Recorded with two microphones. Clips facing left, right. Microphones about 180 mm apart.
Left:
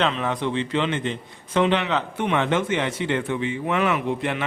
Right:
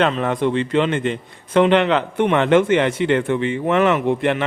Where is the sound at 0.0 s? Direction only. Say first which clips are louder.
Right 5 dB; 50° right (ahead or behind).